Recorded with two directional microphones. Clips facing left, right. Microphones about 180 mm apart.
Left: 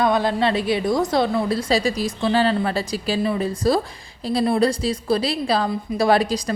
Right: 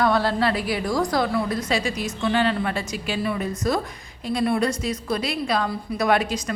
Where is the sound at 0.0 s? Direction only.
20° left (ahead or behind).